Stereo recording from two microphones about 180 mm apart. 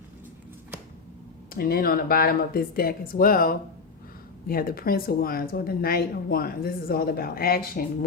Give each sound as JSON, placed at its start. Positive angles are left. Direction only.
{"t": 1.5, "sound": "speech", "side_deg": 55}